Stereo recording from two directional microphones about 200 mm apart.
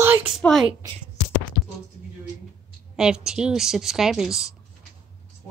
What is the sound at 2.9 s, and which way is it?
A woman's voice, 5° right (ahead or behind).